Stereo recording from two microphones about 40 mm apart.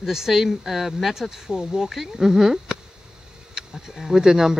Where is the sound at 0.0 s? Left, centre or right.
Centre.